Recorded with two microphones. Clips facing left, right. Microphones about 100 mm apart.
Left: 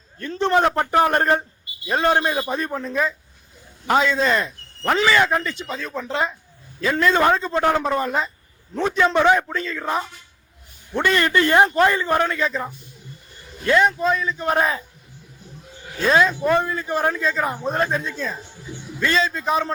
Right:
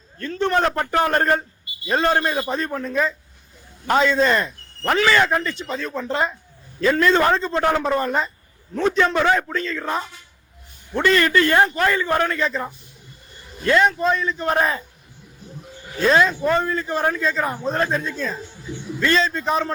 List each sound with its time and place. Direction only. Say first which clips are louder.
0.2 s a man's voice: left 1 dB; 20° left (ahead or behind); by 14.8 s 5° left (ahead or behind)
16.0 s a man's voice: even; 5° left (ahead or behind)
17.6 s a man's voice: even; 15° left (ahead or behind)